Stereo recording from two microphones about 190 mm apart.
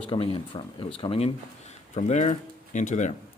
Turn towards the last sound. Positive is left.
turn(degrees=40)  # may be behind; listen again after turning